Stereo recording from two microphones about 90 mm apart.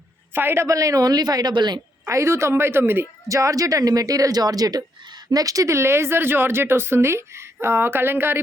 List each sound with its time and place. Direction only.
0.3 s a woman's voice: 25° right (ahead or behind); by 1.8 s 55° right (ahead or behind)
2.0 s speech: 30° right (ahead or behind)
3.2 s speech: 40° right (ahead or behind)